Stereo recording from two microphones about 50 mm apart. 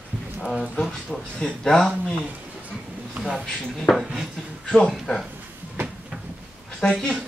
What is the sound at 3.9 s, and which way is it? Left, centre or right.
Dishes, centre.